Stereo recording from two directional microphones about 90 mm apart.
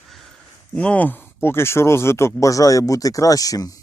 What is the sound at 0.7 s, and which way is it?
Speech, 15° left (ahead or behind).